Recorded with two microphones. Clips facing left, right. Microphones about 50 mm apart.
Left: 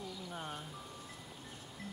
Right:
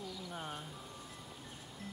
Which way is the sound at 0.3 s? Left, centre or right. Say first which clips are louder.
Even; centre.